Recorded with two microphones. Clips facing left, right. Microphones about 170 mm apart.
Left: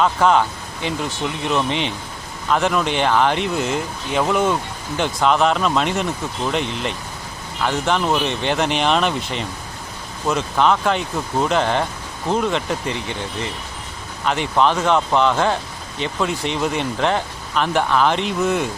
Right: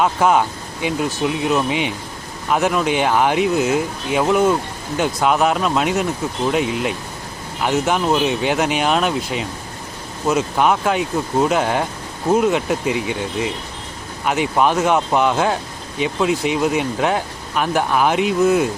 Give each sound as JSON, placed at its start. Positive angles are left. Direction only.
{"t": 0.0, "sound": "speech", "side_deg": -10}